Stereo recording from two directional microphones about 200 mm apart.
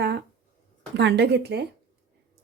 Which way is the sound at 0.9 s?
60° right (ahead or behind).